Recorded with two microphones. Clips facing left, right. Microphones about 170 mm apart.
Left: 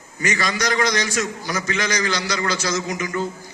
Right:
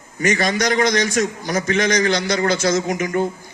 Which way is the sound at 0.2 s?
55° right (ahead or behind).